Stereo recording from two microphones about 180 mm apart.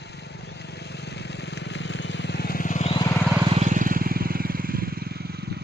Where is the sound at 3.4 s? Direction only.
35° right (ahead or behind).